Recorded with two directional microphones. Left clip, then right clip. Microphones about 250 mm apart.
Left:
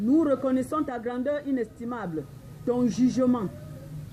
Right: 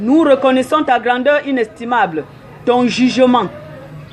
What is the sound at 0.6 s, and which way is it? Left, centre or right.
A woman's voice, right.